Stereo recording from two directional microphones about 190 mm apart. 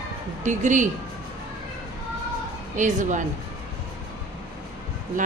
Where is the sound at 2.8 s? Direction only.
40° right (ahead or behind).